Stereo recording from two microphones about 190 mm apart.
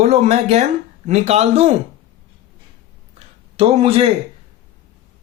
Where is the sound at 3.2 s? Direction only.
30° right (ahead or behind).